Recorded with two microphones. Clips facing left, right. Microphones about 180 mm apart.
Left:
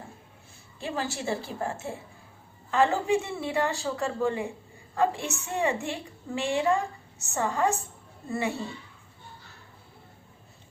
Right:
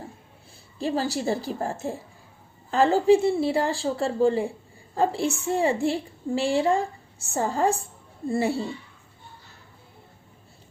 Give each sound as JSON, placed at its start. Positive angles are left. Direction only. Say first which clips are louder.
{"t": 0.8, "sound": "a woman's voice", "louder": "right 6 dB", "side_deg": -35}